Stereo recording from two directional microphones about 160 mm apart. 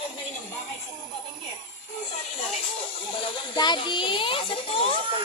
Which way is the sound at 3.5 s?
30° left (ahead or behind).